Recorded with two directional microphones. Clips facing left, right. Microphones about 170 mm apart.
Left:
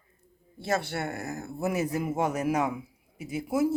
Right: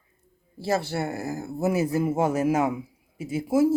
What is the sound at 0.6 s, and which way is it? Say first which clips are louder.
Speech: right 4 dB; 30° right (ahead or behind).